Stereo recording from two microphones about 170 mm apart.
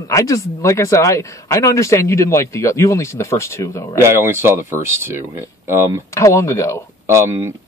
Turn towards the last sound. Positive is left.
turn(degrees=-15)  # may be behind; listen again after turning